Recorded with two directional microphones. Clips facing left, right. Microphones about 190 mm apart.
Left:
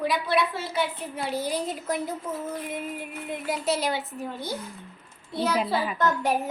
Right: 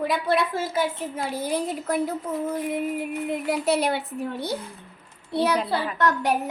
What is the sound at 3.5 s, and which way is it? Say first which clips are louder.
Child singing: right 3 dB; 60° right (ahead or behind).